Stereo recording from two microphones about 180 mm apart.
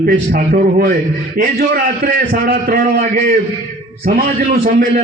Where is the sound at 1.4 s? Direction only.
55° right (ahead or behind).